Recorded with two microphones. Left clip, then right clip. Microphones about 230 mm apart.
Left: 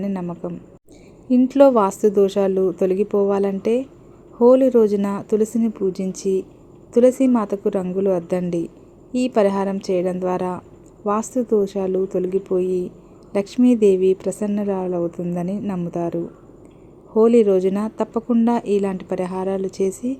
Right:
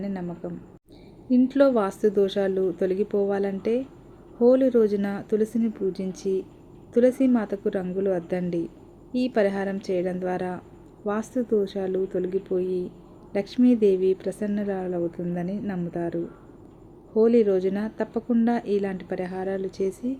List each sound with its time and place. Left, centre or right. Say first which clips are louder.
0.0 s speech: left 6 dB; centre
17.2 s speech: left 5 dB; centre